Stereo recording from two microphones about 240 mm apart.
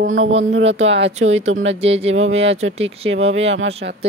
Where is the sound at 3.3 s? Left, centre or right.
Right.